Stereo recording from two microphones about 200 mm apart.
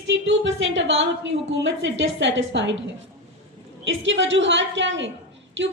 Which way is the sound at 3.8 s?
65° right (ahead or behind).